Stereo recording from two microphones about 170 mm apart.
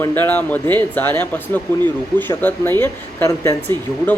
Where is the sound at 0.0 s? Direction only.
10° left (ahead or behind).